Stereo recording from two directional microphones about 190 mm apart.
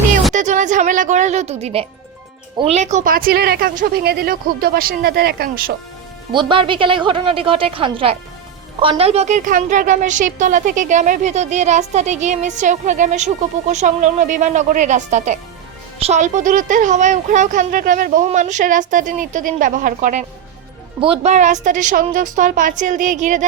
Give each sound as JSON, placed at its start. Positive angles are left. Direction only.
{"t": 0.3, "sound": "a woman's voice", "side_deg": -40}
{"t": 6.3, "sound": "a woman's voice", "side_deg": -25}